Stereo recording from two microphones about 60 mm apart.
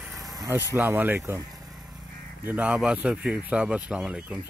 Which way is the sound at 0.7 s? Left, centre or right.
Right.